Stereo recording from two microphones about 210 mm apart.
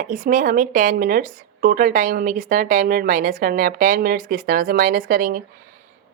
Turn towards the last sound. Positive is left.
turn(degrees=-40)  # may be behind; listen again after turning